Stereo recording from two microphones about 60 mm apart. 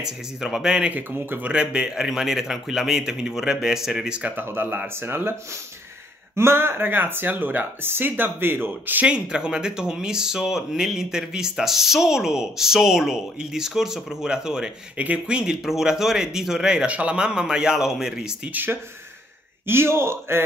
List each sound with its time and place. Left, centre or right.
0.0 s speech: centre
0.9 s speech: right
1.5 s speech: centre
4.2 s speech: right
6.3 s speech: right
9.0 s speech: centre
15.6 s speech: centre
18.5 s speech: right